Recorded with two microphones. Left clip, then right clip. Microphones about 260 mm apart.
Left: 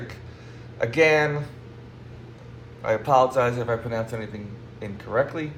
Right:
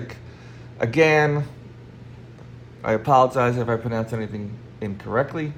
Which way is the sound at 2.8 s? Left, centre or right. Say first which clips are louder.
Right 2 dB; right.